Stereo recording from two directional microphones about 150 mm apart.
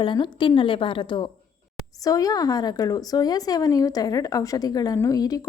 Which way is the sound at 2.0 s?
25° left (ahead or behind).